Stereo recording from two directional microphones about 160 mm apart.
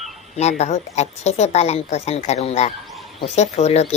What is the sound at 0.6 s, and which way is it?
A woman's voice, 45° left (ahead or behind).